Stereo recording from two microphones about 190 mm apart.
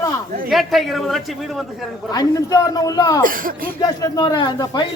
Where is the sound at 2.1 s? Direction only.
20° left (ahead or behind).